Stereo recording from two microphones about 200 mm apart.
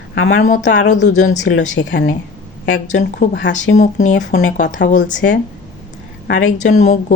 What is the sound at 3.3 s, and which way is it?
Speech, 65° left (ahead or behind).